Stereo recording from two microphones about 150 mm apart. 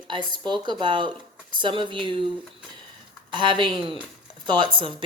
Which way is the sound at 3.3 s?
30° right (ahead or behind).